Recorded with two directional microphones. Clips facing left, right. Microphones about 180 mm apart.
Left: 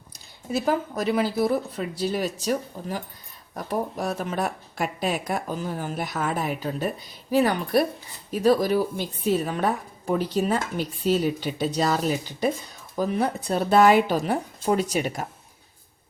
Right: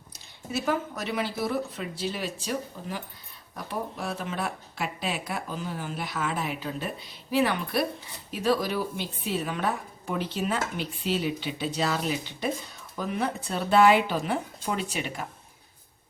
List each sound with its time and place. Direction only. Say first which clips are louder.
0.5 s a woman's voice: left 4 dB; 35° left (ahead or behind)